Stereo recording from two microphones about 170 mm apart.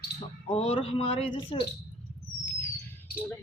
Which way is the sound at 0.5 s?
35° left (ahead or behind).